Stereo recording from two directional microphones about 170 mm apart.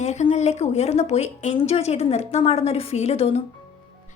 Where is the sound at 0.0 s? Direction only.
45° left (ahead or behind).